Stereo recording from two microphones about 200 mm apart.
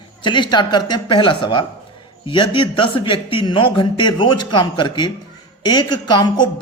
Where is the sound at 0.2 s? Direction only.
25° left (ahead or behind).